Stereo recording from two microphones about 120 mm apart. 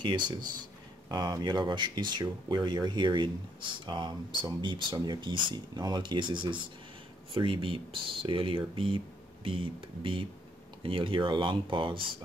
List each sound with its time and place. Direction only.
0.0 s speech: 40° right (ahead or behind)